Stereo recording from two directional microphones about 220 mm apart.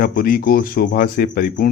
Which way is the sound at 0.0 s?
40° left (ahead or behind).